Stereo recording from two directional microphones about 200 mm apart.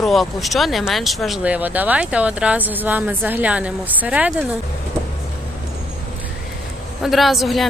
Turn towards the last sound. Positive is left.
turn(degrees=0)  # may be behind; listen again after turning